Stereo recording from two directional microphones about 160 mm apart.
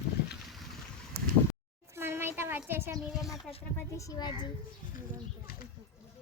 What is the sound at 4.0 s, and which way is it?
Speech, 25° left (ahead or behind).